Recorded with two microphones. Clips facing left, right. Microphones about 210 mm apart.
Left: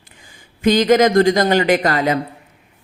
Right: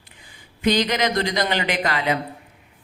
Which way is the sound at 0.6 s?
45° left (ahead or behind).